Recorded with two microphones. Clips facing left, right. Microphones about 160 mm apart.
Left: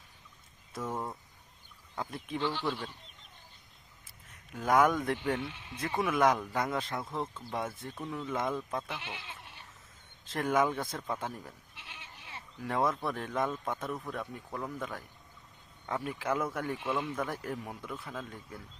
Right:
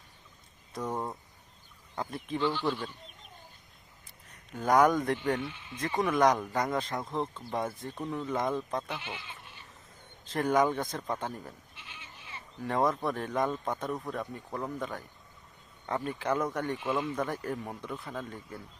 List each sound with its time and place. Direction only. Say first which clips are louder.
0.7 s a sound: right 2 dB; centre (ahead or behind)
2.0 s speech: right 3 dB; centre (ahead or behind)
4.0 s speech: right 1 dB; centre (ahead or behind)
11.8 s goat: even; 65° left (ahead or behind)
12.6 s speech: right 2 dB; centre (ahead or behind)
16.0 s speech: right 2 dB; 5° left (ahead or behind)